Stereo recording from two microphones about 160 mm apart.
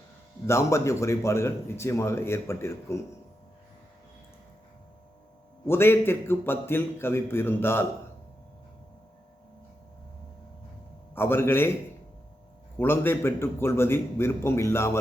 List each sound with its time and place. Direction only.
0.4 s a man's voice: 15° left (ahead or behind)
5.6 s a man's voice: 15° left (ahead or behind)
11.1 s a man's voice: 15° left (ahead or behind)
12.8 s a man's voice: 15° left (ahead or behind)